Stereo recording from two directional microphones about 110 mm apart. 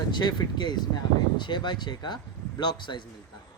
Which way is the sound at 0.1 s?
40° left (ahead or behind).